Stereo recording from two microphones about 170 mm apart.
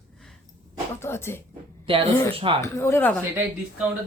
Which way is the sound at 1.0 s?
15° left (ahead or behind).